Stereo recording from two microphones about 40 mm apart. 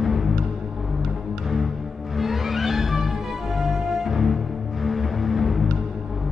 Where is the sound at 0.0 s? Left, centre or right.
Centre.